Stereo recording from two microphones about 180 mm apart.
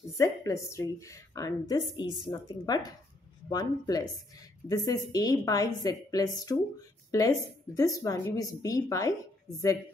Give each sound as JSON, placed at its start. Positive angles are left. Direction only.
{"t": 0.2, "sound": "a woman's voice", "side_deg": 20}